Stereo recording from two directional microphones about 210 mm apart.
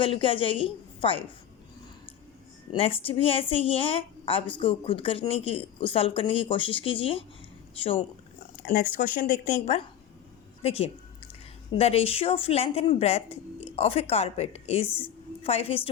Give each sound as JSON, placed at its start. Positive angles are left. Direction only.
{"t": 0.0, "sound": "a woman's voice", "side_deg": 25}
{"t": 2.7, "sound": "a woman's voice", "side_deg": 25}
{"t": 8.6, "sound": "a woman's voice", "side_deg": 40}